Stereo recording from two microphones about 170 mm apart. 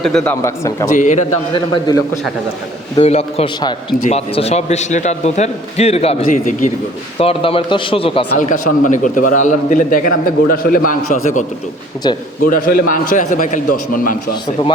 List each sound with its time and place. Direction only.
0.0 s speech: 5° left (ahead or behind)
0.4 s speech: 15° left (ahead or behind)
0.9 s a man's voice: 45° left (ahead or behind)
1.5 s a man's voice: 25° left (ahead or behind)
3.0 s a man's voice: 35° left (ahead or behind)
3.6 s a man's voice: 25° left (ahead or behind)
4.0 s a man's voice: 40° left (ahead or behind)
7.2 s a man's voice: 35° left (ahead or behind)
8.4 s a man's voice: 50° left (ahead or behind)
12.0 s a man's voice: 25° left (ahead or behind)
12.5 s a man's voice: 60° left (ahead or behind)